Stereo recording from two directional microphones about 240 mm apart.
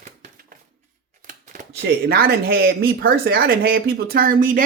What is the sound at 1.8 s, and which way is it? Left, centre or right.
Speech, right.